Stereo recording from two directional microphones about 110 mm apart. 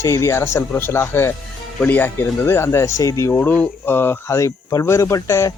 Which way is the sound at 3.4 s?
15° left (ahead or behind).